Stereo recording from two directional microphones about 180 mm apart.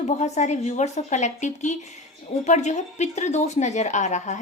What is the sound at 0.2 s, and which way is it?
A woman's voice, 40° left (ahead or behind).